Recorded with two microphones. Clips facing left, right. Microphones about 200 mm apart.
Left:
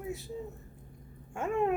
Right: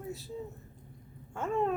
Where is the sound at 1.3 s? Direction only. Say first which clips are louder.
Left 1 dB; 15° left (ahead or behind).